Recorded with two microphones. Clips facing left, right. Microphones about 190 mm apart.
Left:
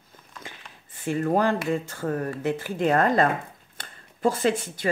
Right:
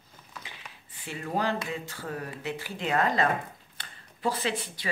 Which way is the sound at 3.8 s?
45° left (ahead or behind).